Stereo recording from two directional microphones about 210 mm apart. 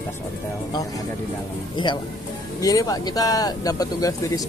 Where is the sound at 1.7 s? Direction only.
20° left (ahead or behind).